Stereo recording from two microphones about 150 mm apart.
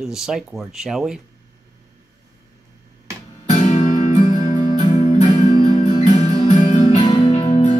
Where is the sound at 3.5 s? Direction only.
55° left (ahead or behind).